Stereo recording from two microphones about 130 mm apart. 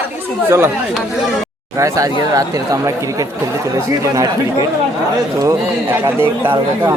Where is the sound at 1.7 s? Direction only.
25° right (ahead or behind).